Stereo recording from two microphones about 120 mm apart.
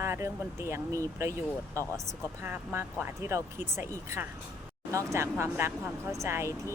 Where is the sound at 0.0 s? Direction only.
25° right (ahead or behind).